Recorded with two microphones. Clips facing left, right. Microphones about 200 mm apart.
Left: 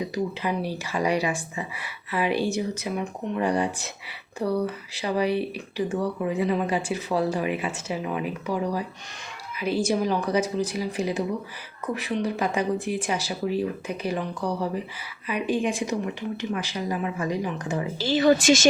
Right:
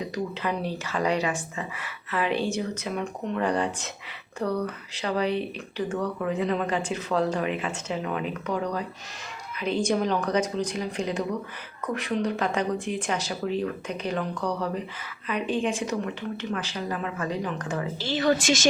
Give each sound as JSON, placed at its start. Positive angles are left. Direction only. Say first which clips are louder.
{"t": 0.1, "sound": "speech", "louder": "left 2 dB", "side_deg": 10}